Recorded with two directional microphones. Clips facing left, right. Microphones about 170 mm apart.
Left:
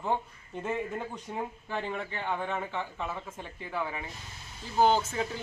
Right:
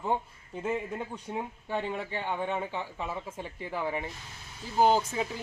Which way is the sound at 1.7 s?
30° right (ahead or behind).